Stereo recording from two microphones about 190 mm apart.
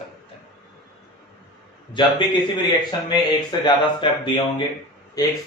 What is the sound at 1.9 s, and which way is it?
Speech, 25° left (ahead or behind).